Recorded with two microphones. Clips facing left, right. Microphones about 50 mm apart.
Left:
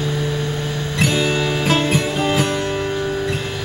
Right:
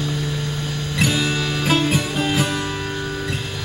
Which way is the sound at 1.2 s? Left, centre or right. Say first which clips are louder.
Left 4 dB; centre.